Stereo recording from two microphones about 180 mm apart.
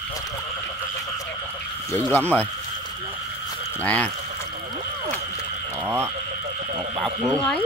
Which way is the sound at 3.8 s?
5° left (ahead or behind).